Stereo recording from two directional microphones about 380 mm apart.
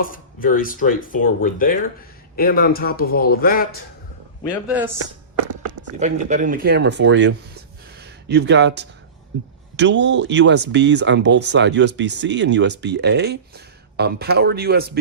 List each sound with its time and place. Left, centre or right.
0.0 s speech: left
6.0 s speech: centre